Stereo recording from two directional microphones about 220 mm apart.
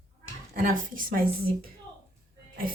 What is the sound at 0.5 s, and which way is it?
Speech, 40° right (ahead or behind).